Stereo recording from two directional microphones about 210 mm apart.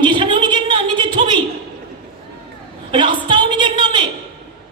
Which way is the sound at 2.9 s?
20° right (ahead or behind).